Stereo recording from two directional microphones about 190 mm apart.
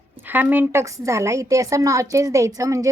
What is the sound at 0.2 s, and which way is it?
A woman's voice, 10° right (ahead or behind).